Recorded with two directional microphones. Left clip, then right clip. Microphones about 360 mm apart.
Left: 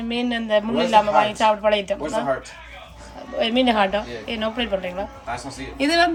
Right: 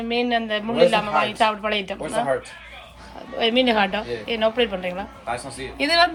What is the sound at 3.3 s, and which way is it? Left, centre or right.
Speech, centre.